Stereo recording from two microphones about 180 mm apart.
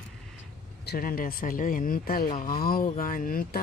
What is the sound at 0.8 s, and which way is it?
Speech, 55° left (ahead or behind).